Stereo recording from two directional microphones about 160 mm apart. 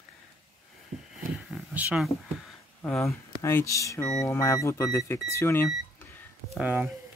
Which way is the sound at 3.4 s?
15° left (ahead or behind).